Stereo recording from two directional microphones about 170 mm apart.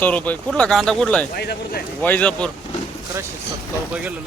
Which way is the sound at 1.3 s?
70° left (ahead or behind).